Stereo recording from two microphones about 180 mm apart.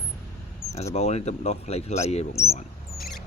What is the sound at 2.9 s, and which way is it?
Rodents, centre (ahead or behind).